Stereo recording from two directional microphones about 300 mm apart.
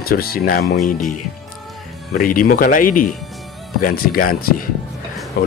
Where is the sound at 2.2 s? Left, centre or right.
Left.